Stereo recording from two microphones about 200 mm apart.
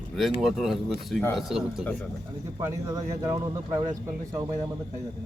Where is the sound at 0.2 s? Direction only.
Centre (ahead or behind).